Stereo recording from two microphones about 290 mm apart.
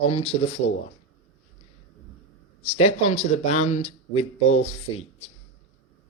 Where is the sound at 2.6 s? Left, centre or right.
Left.